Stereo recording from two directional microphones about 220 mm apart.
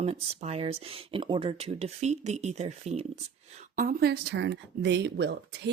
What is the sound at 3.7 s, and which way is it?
Speech, 40° right (ahead or behind).